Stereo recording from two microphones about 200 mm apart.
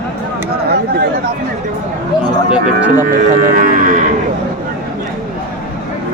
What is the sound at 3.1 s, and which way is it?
Speech, 45° right (ahead or behind).